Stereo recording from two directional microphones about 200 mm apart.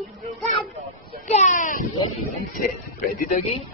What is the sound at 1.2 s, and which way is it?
Speech, 35° left (ahead or behind).